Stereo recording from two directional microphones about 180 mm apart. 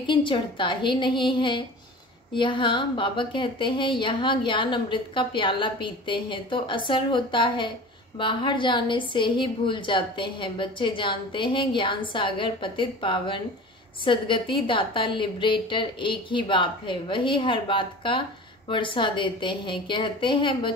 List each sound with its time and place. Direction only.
0.0 s a woman's voice: 30° left (ahead or behind)